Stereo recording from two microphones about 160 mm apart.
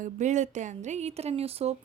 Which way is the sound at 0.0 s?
50° right (ahead or behind).